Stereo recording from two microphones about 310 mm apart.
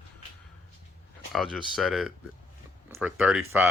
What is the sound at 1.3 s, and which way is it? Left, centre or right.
Speech, centre.